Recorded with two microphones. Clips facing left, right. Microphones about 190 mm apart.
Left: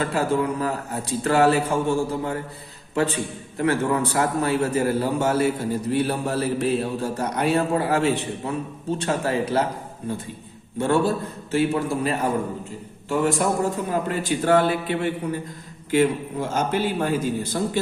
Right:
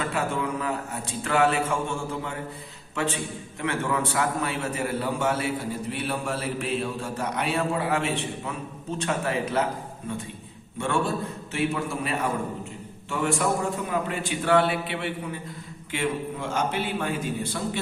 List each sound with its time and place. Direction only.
0.0 s mantra: 35° left (ahead or behind)
2.9 s a man's voice: 35° left (ahead or behind)
3.6 s mantra: 40° left (ahead or behind)
10.8 s mantra: 40° left (ahead or behind)